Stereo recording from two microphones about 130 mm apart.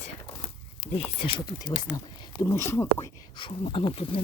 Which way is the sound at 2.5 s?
20° left (ahead or behind).